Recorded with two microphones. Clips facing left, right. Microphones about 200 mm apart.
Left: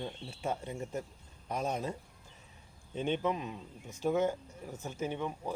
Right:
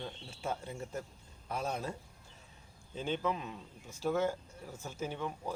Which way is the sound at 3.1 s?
20° left (ahead or behind).